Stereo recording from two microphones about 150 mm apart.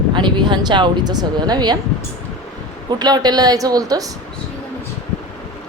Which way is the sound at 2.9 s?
25° right (ahead or behind).